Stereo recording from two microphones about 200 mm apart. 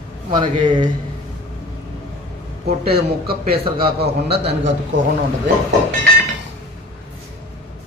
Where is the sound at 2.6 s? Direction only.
50° right (ahead or behind).